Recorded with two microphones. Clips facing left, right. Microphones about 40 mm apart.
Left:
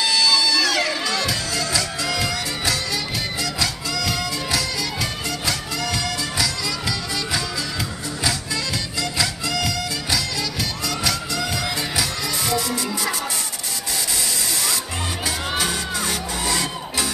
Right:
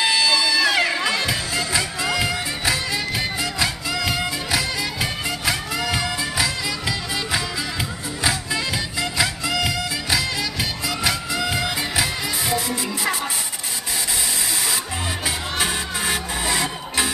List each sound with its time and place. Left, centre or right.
0.0 s music: right
9.0 s music: right
15.6 s music: centre